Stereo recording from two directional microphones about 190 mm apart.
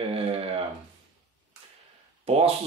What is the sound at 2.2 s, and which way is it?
Speech, 30° right (ahead or behind).